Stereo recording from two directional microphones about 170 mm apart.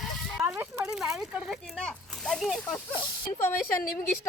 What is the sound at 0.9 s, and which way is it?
Speech, centre (ahead or behind).